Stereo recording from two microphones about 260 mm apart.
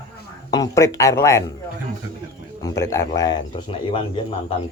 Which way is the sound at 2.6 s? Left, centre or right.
Centre.